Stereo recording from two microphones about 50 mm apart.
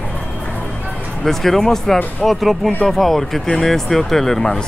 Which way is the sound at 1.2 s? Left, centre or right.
Centre.